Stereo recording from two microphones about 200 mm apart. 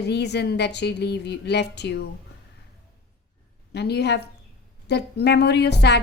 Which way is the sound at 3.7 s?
55° left (ahead or behind).